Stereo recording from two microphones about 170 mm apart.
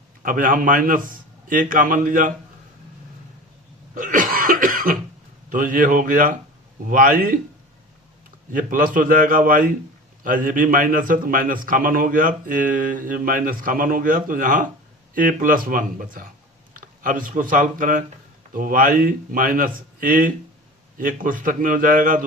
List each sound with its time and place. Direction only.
0.2 s a man's voice: 55° right (ahead or behind)
3.9 s cough: 50° right (ahead or behind)
5.5 s a man's voice: 50° right (ahead or behind)
8.5 s a man's voice: 50° right (ahead or behind)